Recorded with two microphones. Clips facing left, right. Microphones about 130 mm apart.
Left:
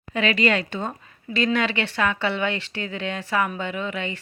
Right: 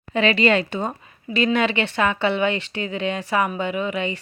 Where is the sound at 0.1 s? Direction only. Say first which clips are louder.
Right 3 dB; 30° right (ahead or behind).